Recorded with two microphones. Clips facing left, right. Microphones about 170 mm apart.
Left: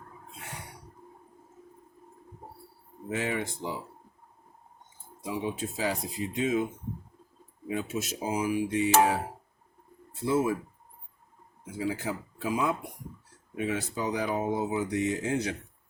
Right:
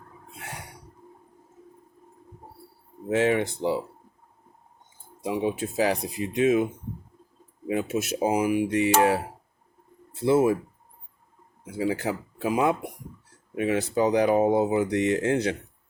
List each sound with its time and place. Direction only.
3.1 s speech: 80° right
5.3 s speech: 70° right (ahead or behind)
7.7 s speech: 70° right (ahead or behind)
10.2 s speech: 70° right (ahead or behind)
11.9 s speech: 70° right (ahead or behind)